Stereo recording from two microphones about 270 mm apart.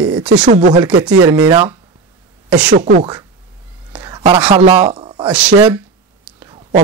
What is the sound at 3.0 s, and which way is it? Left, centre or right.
Speech, centre.